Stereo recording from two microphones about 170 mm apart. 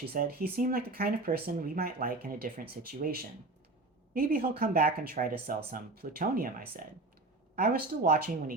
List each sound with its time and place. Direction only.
0.0 s speech: 65° right (ahead or behind)